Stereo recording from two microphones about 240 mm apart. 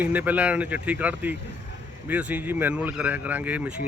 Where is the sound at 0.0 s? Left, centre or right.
Centre.